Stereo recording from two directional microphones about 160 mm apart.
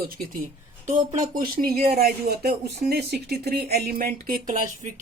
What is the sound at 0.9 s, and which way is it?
Speech, 55° right (ahead or behind).